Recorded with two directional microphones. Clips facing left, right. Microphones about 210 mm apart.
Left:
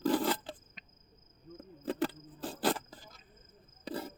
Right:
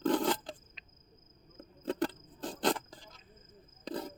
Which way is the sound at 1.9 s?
5° left (ahead or behind).